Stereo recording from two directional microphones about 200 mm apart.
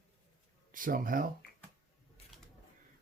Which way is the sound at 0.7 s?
45° right (ahead or behind).